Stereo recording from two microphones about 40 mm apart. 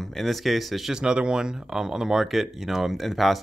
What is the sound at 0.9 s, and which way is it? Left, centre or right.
Speech, right.